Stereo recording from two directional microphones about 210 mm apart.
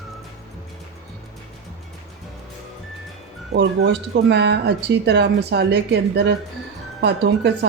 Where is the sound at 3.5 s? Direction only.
55° right (ahead or behind).